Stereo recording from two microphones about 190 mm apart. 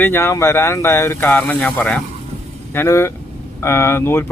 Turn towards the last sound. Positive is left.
turn(degrees=15)  # may be behind; listen again after turning